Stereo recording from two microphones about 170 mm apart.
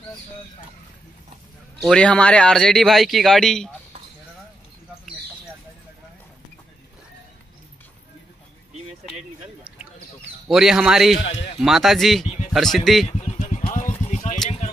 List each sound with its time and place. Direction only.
1.8 s speech: 5° left (ahead or behind)
10.5 s speech: 5° right (ahead or behind)
13.2 s vehicle: 40° left (ahead or behind)